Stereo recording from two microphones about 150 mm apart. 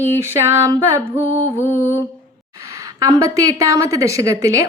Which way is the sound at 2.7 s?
20° right (ahead or behind).